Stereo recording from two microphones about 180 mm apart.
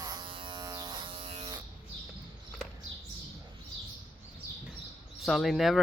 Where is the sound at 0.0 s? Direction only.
25° right (ahead or behind).